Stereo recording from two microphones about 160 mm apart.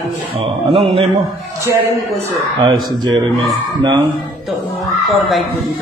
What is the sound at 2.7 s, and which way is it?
Speech, 25° right (ahead or behind).